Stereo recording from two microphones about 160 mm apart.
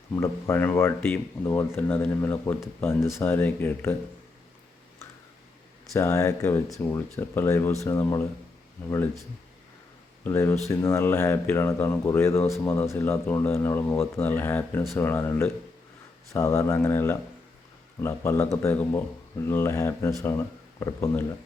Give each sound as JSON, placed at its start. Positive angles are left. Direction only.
{"t": 0.1, "sound": "speech", "side_deg": 15}
{"t": 5.9, "sound": "speech", "side_deg": 20}
{"t": 10.2, "sound": "speech", "side_deg": 15}